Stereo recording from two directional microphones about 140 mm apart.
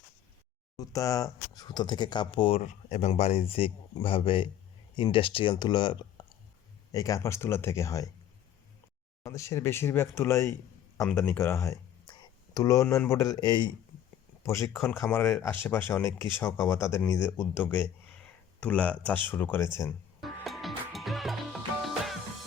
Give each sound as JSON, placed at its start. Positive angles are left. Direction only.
{"t": 0.8, "sound": "speech", "side_deg": 25}
{"t": 2.6, "sound": "speech", "side_deg": 55}
{"t": 6.9, "sound": "speech", "side_deg": 25}
{"t": 9.2, "sound": "speech", "side_deg": 20}
{"t": 14.4, "sound": "speech", "side_deg": 20}
{"t": 20.2, "sound": "music", "side_deg": 0}